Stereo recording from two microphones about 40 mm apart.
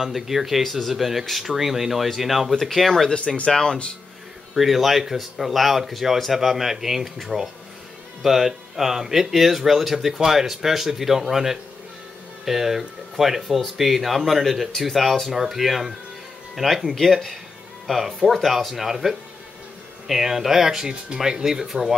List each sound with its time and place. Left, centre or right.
0.0 s speech: centre
3.4 s speech: centre
4.6 s speech: centre
16.9 s speech: centre